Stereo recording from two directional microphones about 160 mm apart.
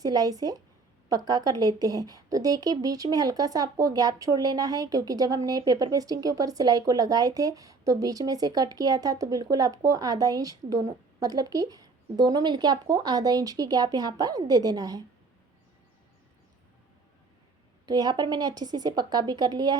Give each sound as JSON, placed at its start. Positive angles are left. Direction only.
{"t": 0.0, "sound": "a woman's voice", "side_deg": -25}
{"t": 17.8, "sound": "a woman's voice", "side_deg": -25}